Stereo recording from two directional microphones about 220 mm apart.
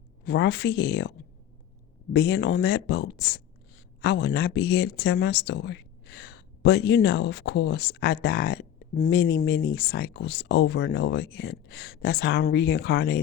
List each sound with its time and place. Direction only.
0.3 s speech: 50° left (ahead or behind)
2.1 s speech: 50° left (ahead or behind)